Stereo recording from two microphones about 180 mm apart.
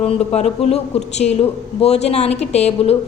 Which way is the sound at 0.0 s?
35° left (ahead or behind).